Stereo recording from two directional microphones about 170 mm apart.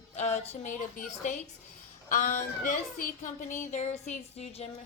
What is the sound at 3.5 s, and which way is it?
A woman's voice, 45° left (ahead or behind).